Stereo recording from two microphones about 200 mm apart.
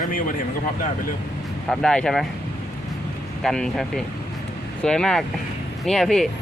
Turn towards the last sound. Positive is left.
turn(degrees=0)  # may be behind; listen again after turning